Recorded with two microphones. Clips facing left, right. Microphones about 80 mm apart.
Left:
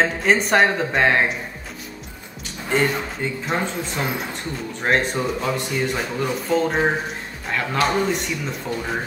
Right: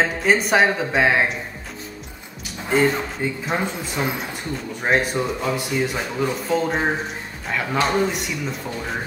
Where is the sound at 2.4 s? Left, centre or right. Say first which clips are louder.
Right 2 dB; centre.